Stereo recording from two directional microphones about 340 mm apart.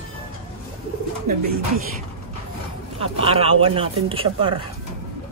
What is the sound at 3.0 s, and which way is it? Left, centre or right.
Speech, centre.